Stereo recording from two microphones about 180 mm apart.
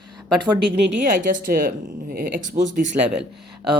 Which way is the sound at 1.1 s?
45° right (ahead or behind).